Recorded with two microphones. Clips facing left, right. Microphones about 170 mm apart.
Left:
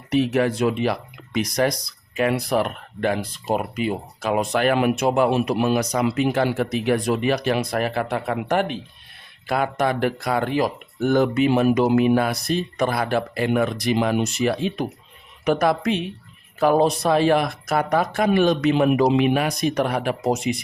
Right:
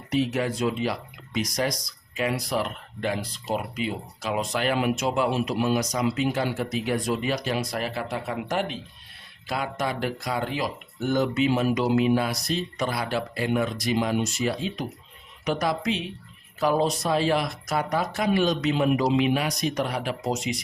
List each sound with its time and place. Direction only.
0.1 s speech: 60° left (ahead or behind)